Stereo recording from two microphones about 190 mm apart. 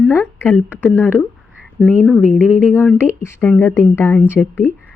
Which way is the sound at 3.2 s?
10° left (ahead or behind).